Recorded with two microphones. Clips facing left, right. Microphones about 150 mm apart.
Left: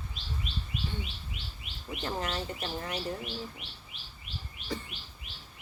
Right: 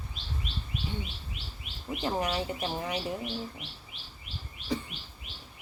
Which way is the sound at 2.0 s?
10° right (ahead or behind).